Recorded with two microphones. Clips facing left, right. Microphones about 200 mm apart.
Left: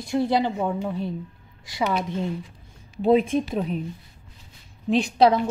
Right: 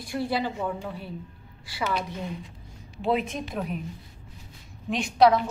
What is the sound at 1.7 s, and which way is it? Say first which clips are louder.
Speech: left 5 dB; 20° left (ahead or behind).